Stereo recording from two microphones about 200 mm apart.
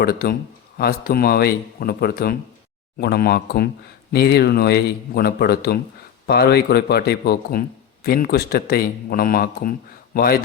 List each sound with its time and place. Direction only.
0.0 s speech: 50° left (ahead or behind)